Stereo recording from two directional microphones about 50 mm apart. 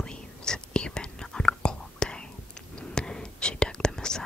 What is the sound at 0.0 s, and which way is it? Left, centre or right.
Whispering, centre.